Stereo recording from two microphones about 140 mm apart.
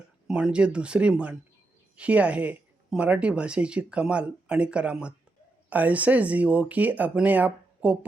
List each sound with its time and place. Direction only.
0.3 s speech: 5° right (ahead or behind)